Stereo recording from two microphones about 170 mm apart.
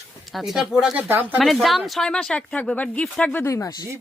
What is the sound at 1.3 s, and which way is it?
A woman's voice, centre (ahead or behind).